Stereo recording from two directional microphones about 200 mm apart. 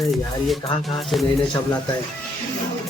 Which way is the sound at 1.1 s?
Centre (ahead or behind).